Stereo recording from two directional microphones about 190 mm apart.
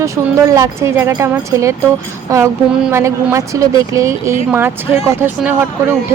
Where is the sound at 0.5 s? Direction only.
15° right (ahead or behind).